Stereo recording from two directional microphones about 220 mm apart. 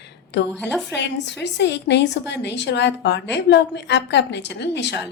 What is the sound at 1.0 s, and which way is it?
A woman's voice, 50° left (ahead or behind).